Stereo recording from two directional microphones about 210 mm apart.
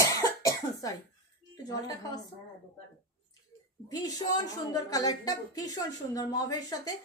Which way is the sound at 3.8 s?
15° left (ahead or behind).